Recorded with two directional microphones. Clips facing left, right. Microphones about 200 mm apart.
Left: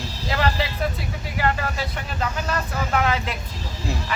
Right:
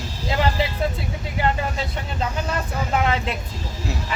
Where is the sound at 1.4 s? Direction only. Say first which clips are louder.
Right 1 dB; 25° right (ahead or behind).